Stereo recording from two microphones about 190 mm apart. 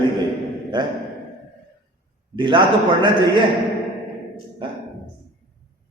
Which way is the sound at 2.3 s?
25° right (ahead or behind).